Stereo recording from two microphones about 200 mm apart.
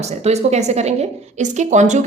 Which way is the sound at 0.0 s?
35° right (ahead or behind).